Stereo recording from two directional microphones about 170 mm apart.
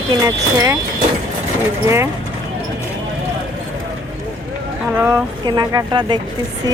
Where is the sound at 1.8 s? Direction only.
15° right (ahead or behind).